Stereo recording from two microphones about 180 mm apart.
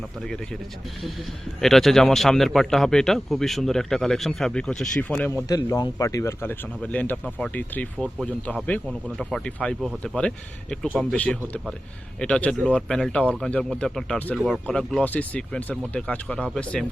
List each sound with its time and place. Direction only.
1.6 s speech: centre (ahead or behind)
5.5 s speech: 20° left (ahead or behind)